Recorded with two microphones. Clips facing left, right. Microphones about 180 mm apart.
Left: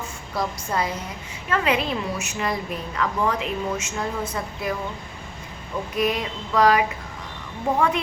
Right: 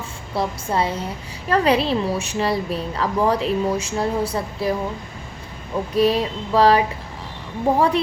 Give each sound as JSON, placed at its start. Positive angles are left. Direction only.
{"t": 0.3, "sound": "a woman's voice", "side_deg": -30}
{"t": 5.9, "sound": "a woman's voice", "side_deg": -30}